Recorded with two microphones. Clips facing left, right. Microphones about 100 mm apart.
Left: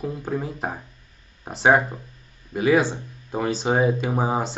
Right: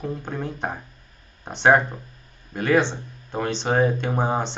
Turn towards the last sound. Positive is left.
turn(degrees=5)  # may be behind; listen again after turning